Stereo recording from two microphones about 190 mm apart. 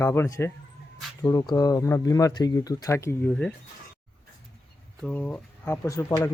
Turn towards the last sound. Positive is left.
turn(degrees=15)  # may be behind; listen again after turning